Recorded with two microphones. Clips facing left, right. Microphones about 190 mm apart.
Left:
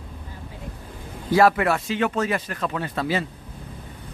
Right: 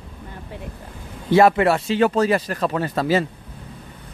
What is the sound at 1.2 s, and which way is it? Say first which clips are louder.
Speech: right 3 dB; 25° right (ahead or behind).